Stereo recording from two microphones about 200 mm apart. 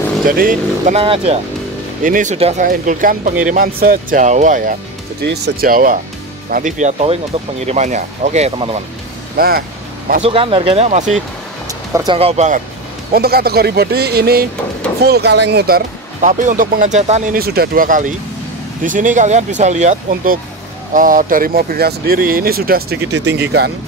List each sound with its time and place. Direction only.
0.3 s speech: 45° right (ahead or behind)
1.0 s speech: 30° right (ahead or behind)
2.0 s speech: 40° right (ahead or behind)
5.2 s speech: 50° right (ahead or behind); by 8.8 s 30° right (ahead or behind)
9.4 s vehicle: 50° right (ahead or behind)
10.2 s speech: 25° right (ahead or behind)
13.1 s speech: 50° right (ahead or behind)